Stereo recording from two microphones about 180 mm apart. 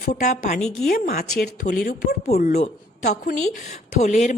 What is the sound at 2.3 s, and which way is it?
A woman's voice, 45° left (ahead or behind).